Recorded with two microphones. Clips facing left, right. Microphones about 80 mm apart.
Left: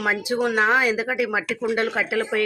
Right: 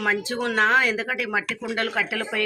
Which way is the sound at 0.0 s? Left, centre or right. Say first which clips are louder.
Left 2 dB; centre.